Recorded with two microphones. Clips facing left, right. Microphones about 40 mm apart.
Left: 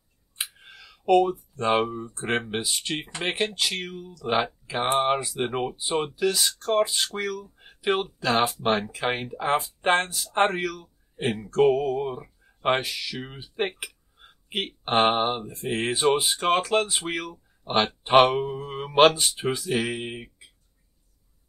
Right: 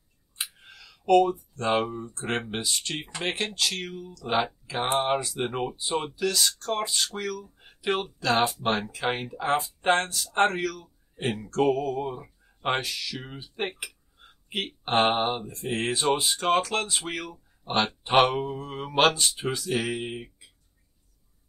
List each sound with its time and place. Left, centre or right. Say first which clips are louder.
0.4 s clicking: left 1 dB; centre
1.5 s speech: left 2 dB; centre